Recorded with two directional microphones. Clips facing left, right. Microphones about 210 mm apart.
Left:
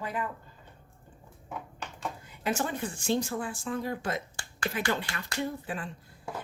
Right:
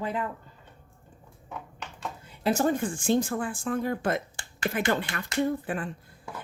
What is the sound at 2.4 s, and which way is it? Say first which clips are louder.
A woman's voice: right 6 dB; 40° right (ahead or behind).